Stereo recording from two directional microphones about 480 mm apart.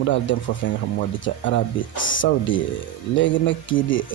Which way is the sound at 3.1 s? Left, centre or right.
Left.